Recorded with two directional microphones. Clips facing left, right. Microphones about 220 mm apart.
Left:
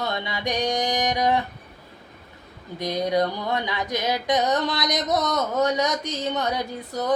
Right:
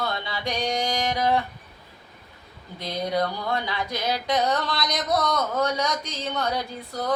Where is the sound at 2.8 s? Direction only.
15° left (ahead or behind).